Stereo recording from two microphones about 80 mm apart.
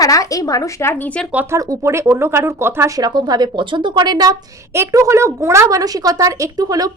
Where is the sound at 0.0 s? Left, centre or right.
Left.